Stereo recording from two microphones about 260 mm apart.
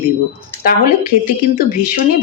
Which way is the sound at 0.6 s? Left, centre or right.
Left.